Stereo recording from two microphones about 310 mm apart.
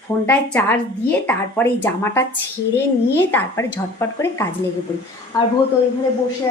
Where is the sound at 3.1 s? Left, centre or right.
Centre.